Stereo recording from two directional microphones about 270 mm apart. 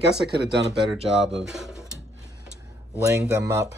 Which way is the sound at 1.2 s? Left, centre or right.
Centre.